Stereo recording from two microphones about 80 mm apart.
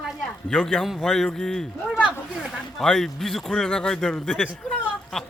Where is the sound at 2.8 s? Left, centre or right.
Centre.